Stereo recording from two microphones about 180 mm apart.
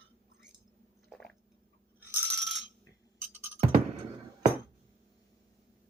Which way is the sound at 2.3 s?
Centre (ahead or behind).